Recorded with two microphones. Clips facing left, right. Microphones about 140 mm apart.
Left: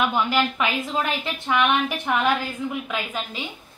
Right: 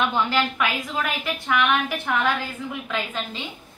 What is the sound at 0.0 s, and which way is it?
A woman's voice, 15° left (ahead or behind).